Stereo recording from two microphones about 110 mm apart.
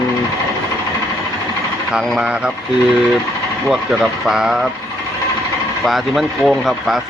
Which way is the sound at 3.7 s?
5° right (ahead or behind).